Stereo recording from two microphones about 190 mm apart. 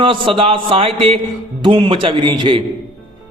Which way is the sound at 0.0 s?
25° right (ahead or behind).